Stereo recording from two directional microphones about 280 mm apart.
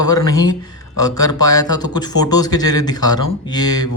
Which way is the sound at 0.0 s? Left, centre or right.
Centre.